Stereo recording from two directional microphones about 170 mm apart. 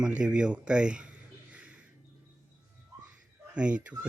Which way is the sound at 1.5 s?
10° right (ahead or behind).